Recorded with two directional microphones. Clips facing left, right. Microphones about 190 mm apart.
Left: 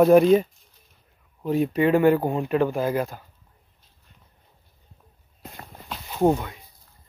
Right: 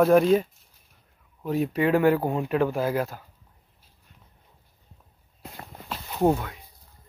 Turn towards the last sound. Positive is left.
turn(degrees=0)  # may be behind; listen again after turning